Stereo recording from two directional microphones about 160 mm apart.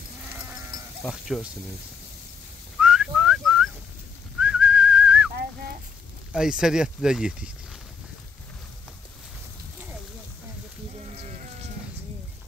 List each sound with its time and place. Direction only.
1.0 s speech: centre (ahead or behind)
2.8 s whistling: 5° right (ahead or behind)
6.3 s speech: 5° right (ahead or behind)
11.1 s sheep: 45° right (ahead or behind)